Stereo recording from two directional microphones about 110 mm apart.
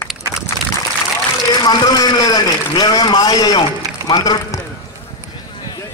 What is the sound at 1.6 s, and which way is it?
A man's voice, 35° left (ahead or behind).